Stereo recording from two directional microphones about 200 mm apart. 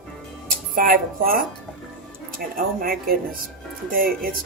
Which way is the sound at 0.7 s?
45° right (ahead or behind).